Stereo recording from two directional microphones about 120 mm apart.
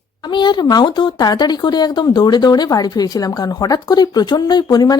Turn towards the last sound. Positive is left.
turn(degrees=35)  # may be behind; listen again after turning